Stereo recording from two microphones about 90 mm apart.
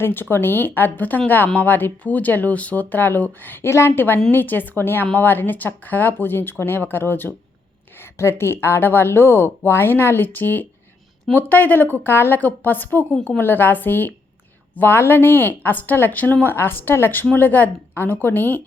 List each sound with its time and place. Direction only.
0.0 s a woman's voice: 25° left (ahead or behind)